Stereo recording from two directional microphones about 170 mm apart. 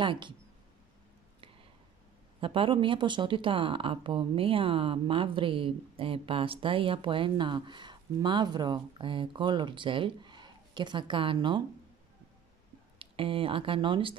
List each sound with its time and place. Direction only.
0.0 s speech: 30° right (ahead or behind)
2.4 s speech: 30° right (ahead or behind)
13.0 s speech: 30° right (ahead or behind)